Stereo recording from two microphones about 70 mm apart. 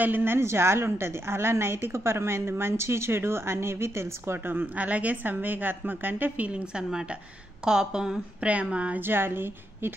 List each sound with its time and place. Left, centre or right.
0.0 s a woman's voice: right
9.0 s a woman's voice: right